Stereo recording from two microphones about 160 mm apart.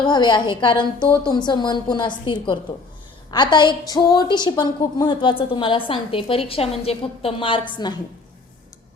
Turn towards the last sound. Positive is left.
turn(degrees=30)  # may be behind; listen again after turning